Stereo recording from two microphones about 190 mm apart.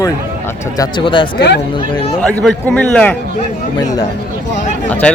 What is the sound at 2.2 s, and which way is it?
Speech, 5° left (ahead or behind).